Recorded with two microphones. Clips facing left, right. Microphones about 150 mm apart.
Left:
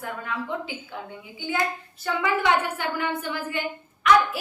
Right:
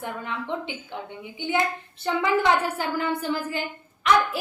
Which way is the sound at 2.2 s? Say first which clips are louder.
Right 1 dB; 35° right (ahead or behind).